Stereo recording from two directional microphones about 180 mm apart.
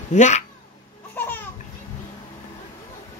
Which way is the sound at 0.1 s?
40° left (ahead or behind).